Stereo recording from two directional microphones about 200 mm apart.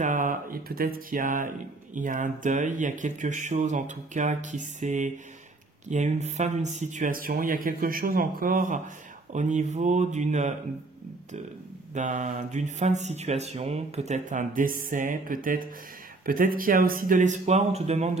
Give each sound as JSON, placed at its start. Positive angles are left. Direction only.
{"t": 0.0, "sound": "speech", "side_deg": -40}
{"t": 11.9, "sound": "speech", "side_deg": -40}